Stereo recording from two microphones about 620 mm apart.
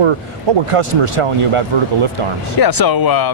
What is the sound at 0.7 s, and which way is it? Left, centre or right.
Speech, right.